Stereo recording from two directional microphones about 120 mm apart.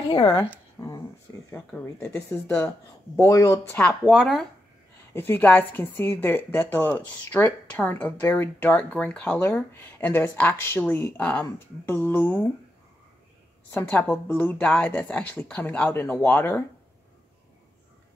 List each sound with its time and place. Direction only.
0.1 s speech: 35° left (ahead or behind)
0.7 s a sound: 30° left (ahead or behind)
2.0 s a woman's voice: 15° left (ahead or behind)
4.0 s speech: centre (ahead or behind)
5.1 s a woman's voice: 20° left (ahead or behind)
13.7 s a woman's voice: 15° left (ahead or behind)